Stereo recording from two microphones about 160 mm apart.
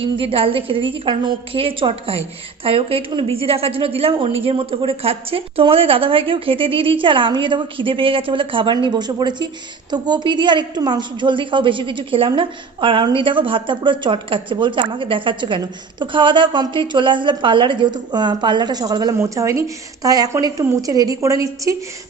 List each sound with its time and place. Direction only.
0.0 s a woman's voice: 35° right (ahead or behind)